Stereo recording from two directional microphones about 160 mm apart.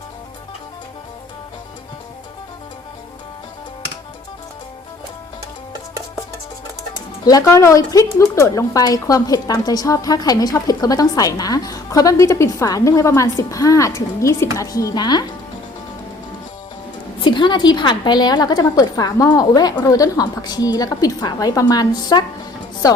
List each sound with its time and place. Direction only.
7.3 s speech: 20° left (ahead or behind)
17.2 s speech: 30° left (ahead or behind)